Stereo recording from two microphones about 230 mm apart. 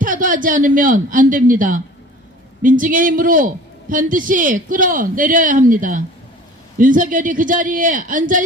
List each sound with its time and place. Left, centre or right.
0.0 s a man's voice: right